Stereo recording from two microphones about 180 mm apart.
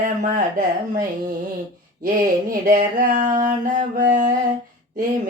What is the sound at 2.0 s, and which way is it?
Mantra, 50° right (ahead or behind).